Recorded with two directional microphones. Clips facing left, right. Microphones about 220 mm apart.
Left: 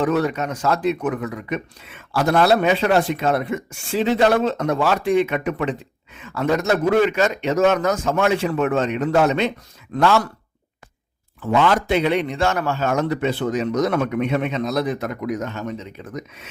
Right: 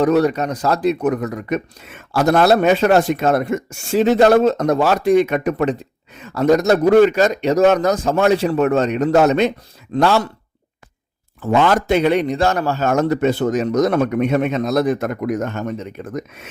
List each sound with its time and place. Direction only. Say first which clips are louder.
0.0 s speech: right 5 dB; 40° right (ahead or behind)
11.3 s speech: right 3 dB; 45° right (ahead or behind)